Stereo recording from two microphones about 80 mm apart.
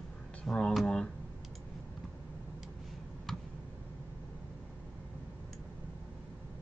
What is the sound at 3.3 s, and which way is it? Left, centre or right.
Tick, centre.